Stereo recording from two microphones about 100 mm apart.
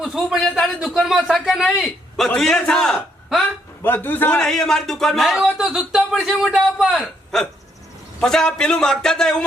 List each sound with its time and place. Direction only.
0.0 s a man's voice: 5° right (ahead or behind)
3.8 s a man's voice: 20° left (ahead or behind)
4.4 s speech: 5° left (ahead or behind)
8.2 s speech: 5° left (ahead or behind)